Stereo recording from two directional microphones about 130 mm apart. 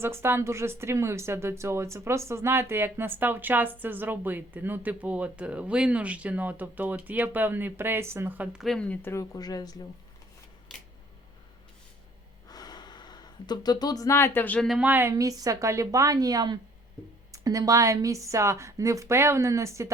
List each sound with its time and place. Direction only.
0.0 s a woman's voice: 20° right (ahead or behind)
8.6 s a woman's voice: 5° left (ahead or behind)
9.3 s speech: 30° left (ahead or behind)
12.5 s a sound: 30° left (ahead or behind); by 14.7 s 10° left (ahead or behind)
14.7 s a woman's voice: 10° right (ahead or behind)
15.1 s a woman's voice: 25° right (ahead or behind)